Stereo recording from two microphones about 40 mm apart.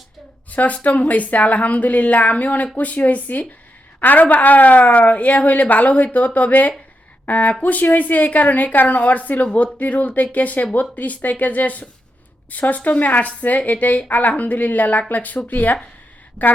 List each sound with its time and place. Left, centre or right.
0.5 s a woman's voice: left